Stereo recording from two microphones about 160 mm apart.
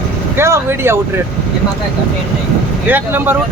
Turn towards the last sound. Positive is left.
turn(degrees=-15)  # may be behind; listen again after turning